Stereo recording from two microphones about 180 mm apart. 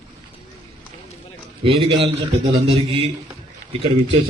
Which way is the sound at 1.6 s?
30° right (ahead or behind).